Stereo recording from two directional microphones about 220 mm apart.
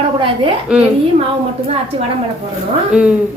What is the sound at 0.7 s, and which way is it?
Speech, 5° right (ahead or behind).